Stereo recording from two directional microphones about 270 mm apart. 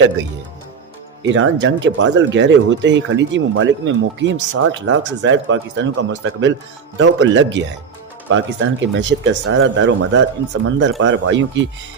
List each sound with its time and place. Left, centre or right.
1.2 s speech: right